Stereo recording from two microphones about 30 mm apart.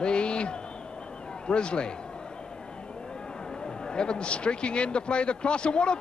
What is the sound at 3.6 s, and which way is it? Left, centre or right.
A man's voice, left.